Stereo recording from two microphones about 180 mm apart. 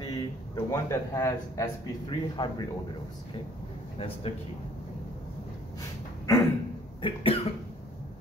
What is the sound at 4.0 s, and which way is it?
Speech, 30° left (ahead or behind).